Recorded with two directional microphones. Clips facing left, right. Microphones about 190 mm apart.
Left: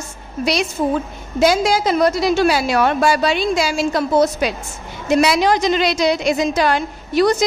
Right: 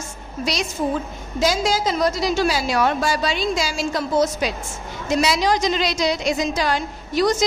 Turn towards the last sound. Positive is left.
turn(degrees=60)  # may be behind; listen again after turning